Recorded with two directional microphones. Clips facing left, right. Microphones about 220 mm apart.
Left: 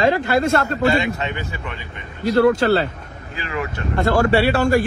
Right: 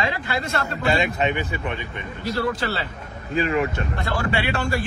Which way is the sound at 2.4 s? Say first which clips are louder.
Left 11 dB; 50° left (ahead or behind).